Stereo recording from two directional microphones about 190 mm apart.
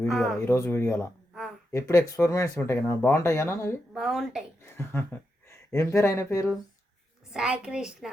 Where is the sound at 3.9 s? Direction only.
Centre (ahead or behind).